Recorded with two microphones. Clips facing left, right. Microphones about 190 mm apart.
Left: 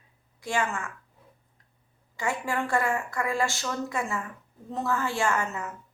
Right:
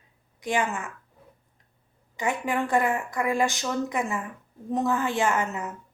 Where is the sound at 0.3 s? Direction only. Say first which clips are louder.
Right 2 dB; 20° right (ahead or behind).